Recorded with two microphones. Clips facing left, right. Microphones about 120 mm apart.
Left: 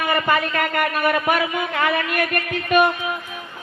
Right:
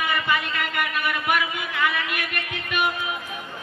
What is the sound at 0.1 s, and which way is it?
Speech, 45° left (ahead or behind).